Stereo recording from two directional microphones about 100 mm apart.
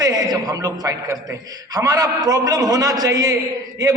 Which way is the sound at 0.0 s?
40° right (ahead or behind).